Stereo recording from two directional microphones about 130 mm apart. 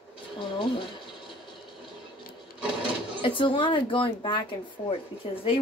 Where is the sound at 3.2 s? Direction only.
40° left (ahead or behind).